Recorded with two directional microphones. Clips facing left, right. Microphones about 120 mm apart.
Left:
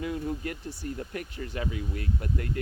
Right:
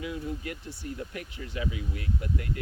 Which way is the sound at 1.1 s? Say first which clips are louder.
Left 2 dB; 45° left (ahead or behind).